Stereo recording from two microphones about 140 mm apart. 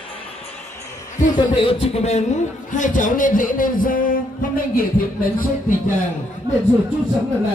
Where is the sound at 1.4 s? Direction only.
40° left (ahead or behind); by 5.9 s 80° left.